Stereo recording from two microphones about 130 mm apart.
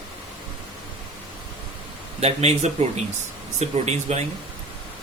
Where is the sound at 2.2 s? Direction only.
55° right (ahead or behind).